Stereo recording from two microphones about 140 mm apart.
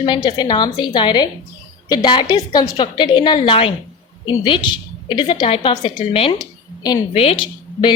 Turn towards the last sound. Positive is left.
turn(degrees=35)  # may be behind; listen again after turning